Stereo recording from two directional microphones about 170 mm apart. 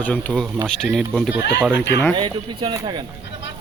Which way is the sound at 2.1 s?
30° right (ahead or behind).